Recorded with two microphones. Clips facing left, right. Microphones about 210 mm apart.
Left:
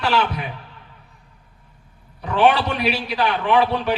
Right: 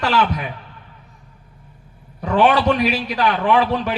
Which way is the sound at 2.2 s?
45° right (ahead or behind).